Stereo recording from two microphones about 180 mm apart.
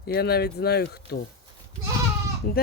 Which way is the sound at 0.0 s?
60° left (ahead or behind).